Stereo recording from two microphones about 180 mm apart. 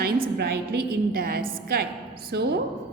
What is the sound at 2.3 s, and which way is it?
Speech, 65° right (ahead or behind).